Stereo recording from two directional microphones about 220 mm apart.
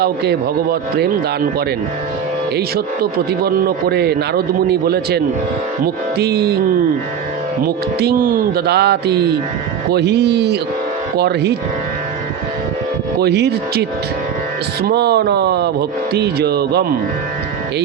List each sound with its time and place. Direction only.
0.0 s a man's voice: 45° right (ahead or behind)
13.1 s a man's voice: 50° right (ahead or behind)
14.8 s a man's voice: 45° right (ahead or behind)